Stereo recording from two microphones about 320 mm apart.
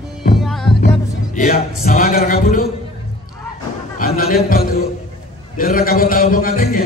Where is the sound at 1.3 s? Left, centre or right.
Left.